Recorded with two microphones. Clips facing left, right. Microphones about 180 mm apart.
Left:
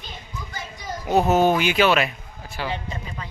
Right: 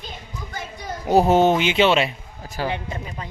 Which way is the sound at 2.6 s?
40° right (ahead or behind).